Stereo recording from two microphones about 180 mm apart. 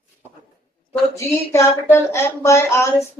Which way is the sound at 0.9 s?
15° left (ahead or behind).